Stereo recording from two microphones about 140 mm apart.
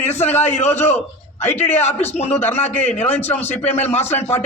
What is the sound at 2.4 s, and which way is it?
A man's voice, 15° left (ahead or behind).